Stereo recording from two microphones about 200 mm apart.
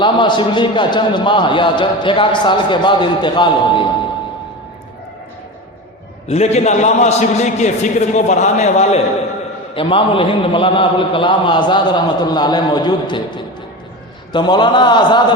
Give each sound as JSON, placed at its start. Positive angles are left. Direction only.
{"t": 0.0, "sound": "a man's voice", "side_deg": 25}
{"t": 6.2, "sound": "a man's voice", "side_deg": 30}